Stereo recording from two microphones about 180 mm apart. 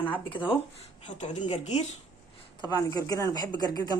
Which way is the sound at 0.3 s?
30° left (ahead or behind).